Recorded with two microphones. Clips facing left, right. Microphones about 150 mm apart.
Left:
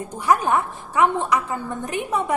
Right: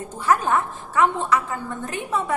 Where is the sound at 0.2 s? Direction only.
15° left (ahead or behind).